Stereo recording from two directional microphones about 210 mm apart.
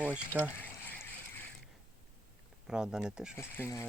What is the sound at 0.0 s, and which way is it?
Speech, 5° right (ahead or behind).